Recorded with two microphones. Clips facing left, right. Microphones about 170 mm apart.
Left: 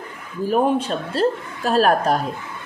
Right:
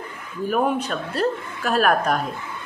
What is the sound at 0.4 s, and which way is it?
Speech, 30° left (ahead or behind).